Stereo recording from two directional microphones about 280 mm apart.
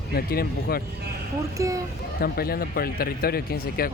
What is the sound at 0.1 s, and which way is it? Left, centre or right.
Speech, left.